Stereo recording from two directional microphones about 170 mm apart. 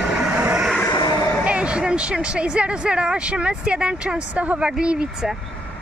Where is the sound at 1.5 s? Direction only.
5° right (ahead or behind).